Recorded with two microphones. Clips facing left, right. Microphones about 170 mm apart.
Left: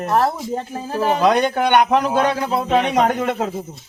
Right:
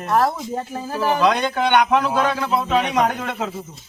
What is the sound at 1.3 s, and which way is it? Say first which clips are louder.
A man's voice: left 3 dB; 45° left (ahead or behind).